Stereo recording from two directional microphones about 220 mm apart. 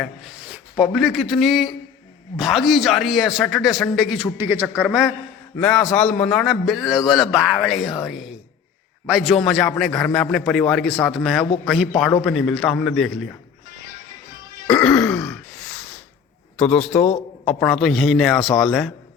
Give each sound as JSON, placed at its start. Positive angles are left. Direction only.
{"t": 0.0, "sound": "a man's voice", "side_deg": 0}
{"t": 14.7, "sound": "throat clearing", "side_deg": 5}
{"t": 16.6, "sound": "a man's voice", "side_deg": 5}